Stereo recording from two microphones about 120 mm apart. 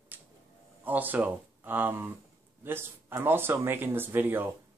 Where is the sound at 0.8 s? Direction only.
15° right (ahead or behind).